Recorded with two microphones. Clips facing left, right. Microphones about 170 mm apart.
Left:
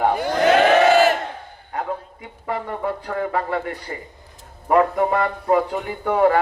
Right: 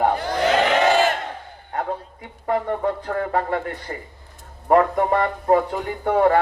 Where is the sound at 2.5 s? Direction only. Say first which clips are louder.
Right 3 dB; 40° right (ahead or behind).